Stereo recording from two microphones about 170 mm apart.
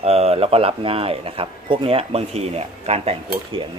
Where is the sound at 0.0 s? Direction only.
35° right (ahead or behind).